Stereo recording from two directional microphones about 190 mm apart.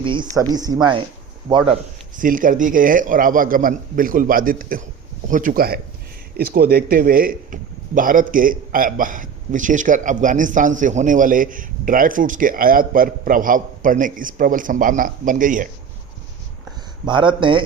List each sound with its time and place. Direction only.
0.0 s a woman's voice: 25° right (ahead or behind); by 15.7 s 45° right (ahead or behind)
17.1 s a woman's voice: 25° right (ahead or behind)